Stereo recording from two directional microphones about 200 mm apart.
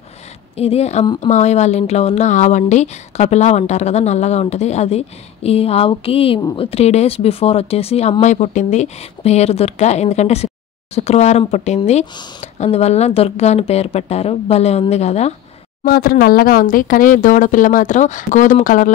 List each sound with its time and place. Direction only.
0.6 s speech: 30° left (ahead or behind)
15.8 s speech: 50° left (ahead or behind)